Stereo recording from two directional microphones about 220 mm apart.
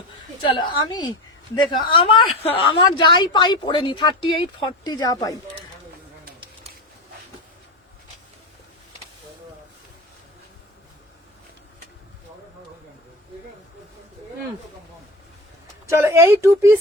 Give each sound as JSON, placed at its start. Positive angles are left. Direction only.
{"t": 0.4, "sound": "a woman's voice", "side_deg": 20}
{"t": 15.9, "sound": "speech", "side_deg": -15}